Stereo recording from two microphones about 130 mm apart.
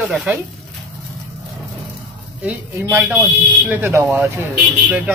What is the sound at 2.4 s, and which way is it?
Speech, 15° right (ahead or behind).